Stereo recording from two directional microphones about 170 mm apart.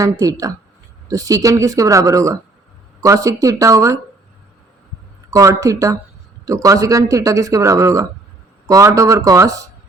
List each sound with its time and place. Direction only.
0.0 s speech: 20° right (ahead or behind)
5.3 s speech: 20° right (ahead or behind)